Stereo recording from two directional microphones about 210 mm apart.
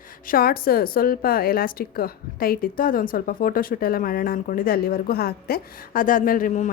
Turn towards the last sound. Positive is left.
turn(degrees=40)  # may be behind; listen again after turning